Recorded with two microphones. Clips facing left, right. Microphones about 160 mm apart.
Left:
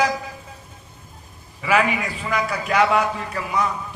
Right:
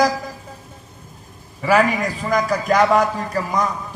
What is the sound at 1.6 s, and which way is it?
A man's voice, 35° right (ahead or behind).